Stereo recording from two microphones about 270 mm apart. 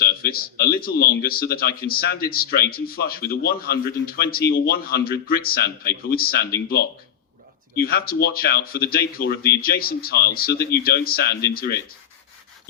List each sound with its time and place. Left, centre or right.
0.0 s a man's voice: left
7.8 s a man's voice: left